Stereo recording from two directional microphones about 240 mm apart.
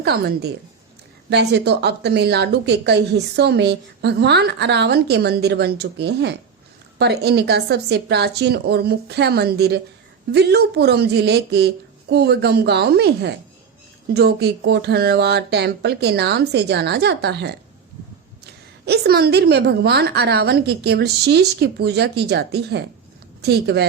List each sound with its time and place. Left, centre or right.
0.0 s a woman's voice: right
18.9 s a woman's voice: right